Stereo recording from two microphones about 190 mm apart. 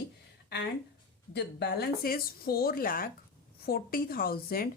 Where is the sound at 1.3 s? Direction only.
60° left (ahead or behind).